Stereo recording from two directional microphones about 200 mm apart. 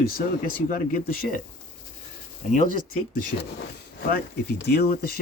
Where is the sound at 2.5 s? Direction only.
40° left (ahead or behind).